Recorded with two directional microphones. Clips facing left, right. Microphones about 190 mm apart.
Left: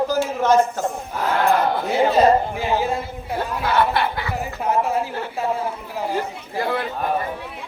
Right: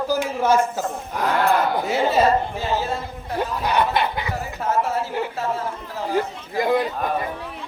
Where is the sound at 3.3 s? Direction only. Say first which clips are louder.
Left 1 dB; 15° right (ahead or behind).